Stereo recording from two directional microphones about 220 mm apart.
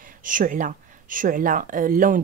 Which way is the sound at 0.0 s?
40° right (ahead or behind).